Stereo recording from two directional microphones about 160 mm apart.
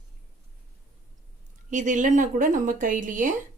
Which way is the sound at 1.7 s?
50° right (ahead or behind).